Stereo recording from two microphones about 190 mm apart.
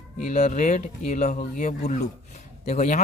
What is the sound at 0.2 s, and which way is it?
Speech, 40° left (ahead or behind).